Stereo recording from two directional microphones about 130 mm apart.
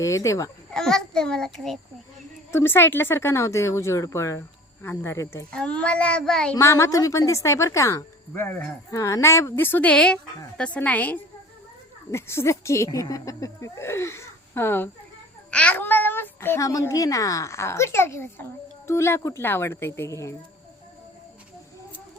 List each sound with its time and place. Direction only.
0.0 s speech: 25° left (ahead or behind)
0.7 s a child's voice: 5° left (ahead or behind)
2.5 s speech: 20° left (ahead or behind)
5.5 s speech: 10° left (ahead or behind)
6.6 s a child's voice: 20° left (ahead or behind)